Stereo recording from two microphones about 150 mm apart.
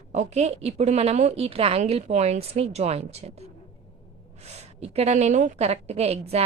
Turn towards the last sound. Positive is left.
turn(degrees=-45)  # may be behind; listen again after turning